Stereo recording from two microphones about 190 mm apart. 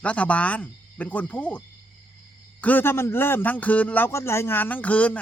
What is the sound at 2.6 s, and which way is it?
Speech, 10° left (ahead or behind).